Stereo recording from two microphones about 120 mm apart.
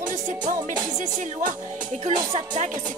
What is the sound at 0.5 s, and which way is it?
Music, 90° right.